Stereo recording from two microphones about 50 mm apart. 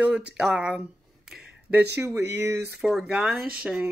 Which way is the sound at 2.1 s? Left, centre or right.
Right.